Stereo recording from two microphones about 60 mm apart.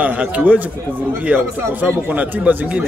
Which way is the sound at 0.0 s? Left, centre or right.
Right.